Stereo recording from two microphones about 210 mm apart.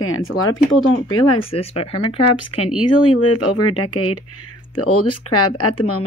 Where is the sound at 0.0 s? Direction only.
75° left (ahead or behind).